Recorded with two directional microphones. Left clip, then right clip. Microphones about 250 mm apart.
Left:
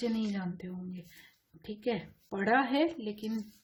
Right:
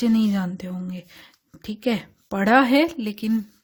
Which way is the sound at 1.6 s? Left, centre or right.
Right.